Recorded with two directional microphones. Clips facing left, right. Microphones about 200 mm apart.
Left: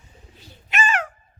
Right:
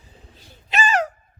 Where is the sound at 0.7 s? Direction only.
35° right (ahead or behind).